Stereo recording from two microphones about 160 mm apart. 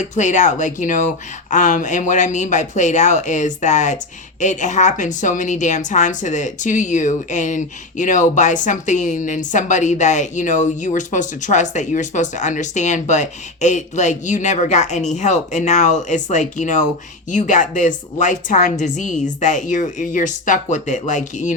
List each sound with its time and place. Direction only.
0.0 s speech: 50° left (ahead or behind)